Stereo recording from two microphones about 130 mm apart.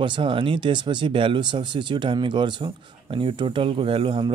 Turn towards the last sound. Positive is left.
turn(degrees=-45)  # may be behind; listen again after turning